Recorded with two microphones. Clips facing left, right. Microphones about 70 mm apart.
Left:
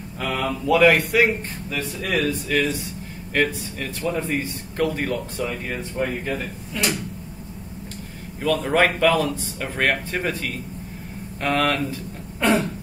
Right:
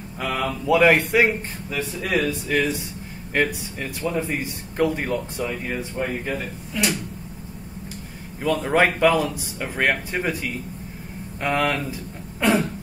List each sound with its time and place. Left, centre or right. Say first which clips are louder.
0.2 s speech: even; centre
0.7 s speech: even; right
4.0 s speech: even; centre
4.4 s speech: right 1 dB; centre
5.4 s speech: even; centre
8.4 s speech: even; centre